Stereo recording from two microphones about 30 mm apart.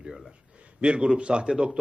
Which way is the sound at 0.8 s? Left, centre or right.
Right.